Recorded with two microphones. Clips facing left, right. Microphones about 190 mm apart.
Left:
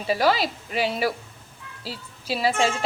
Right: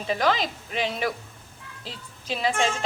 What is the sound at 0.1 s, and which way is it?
A woman's voice, 10° left (ahead or behind).